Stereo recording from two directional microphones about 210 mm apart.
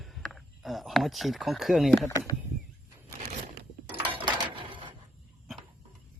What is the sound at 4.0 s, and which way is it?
Dishes, 25° right (ahead or behind).